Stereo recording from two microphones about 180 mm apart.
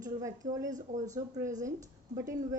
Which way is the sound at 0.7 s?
45° right (ahead or behind).